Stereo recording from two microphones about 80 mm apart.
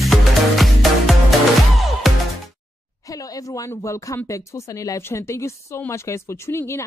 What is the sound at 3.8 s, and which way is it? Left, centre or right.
Speech, left.